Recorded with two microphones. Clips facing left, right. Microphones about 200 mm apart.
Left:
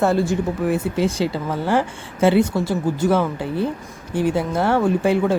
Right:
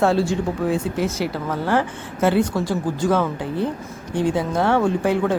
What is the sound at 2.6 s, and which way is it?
Speech, 25° left (ahead or behind).